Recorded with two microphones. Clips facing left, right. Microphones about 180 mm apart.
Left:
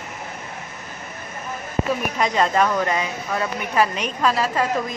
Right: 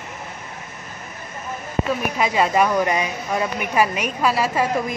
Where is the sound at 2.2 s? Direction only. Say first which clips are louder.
Right 1 dB; 5° right (ahead or behind).